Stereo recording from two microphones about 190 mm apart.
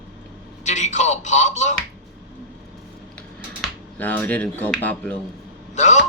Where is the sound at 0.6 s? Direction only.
40° left (ahead or behind).